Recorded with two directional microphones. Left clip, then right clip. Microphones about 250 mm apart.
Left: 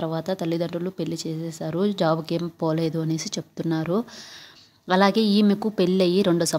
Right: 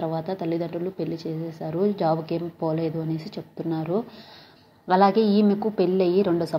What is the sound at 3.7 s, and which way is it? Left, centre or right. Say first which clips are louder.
A woman's voice: left 1 dB; left.